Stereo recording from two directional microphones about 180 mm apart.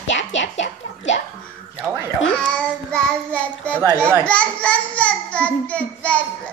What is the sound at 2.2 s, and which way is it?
Child singing, 5° left (ahead or behind).